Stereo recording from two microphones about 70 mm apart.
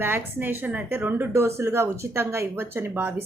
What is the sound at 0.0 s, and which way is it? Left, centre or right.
A woman's voice, right.